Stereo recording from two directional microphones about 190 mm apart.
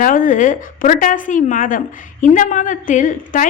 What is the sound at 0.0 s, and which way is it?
A woman's voice, 45° left (ahead or behind).